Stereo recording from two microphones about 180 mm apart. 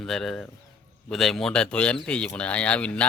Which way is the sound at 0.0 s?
Centre (ahead or behind).